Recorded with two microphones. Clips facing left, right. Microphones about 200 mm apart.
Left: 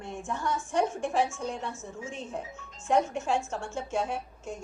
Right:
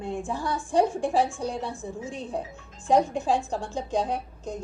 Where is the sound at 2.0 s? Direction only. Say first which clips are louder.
Right 3 dB; 35° right (ahead or behind).